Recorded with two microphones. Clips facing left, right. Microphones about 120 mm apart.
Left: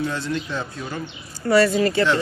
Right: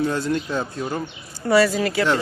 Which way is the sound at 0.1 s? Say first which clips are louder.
Right 3 dB; 45° right (ahead or behind).